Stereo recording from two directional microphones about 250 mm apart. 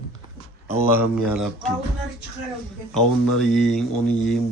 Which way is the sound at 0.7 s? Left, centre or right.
Centre.